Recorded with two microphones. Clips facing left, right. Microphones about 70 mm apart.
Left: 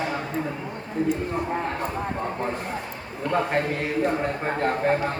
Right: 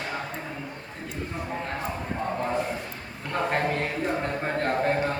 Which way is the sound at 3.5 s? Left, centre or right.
Centre.